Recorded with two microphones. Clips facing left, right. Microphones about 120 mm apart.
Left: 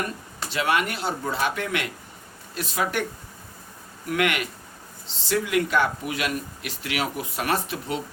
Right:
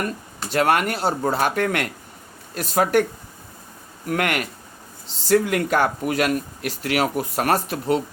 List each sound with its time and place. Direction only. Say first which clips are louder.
0.5 s speech: right 5 dB; 45° right (ahead or behind)
4.0 s speech: right 2 dB; 45° right (ahead or behind)